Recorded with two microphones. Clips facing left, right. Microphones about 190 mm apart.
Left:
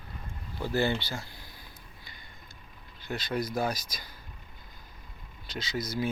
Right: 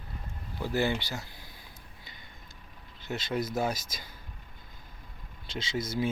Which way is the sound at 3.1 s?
25° right (ahead or behind).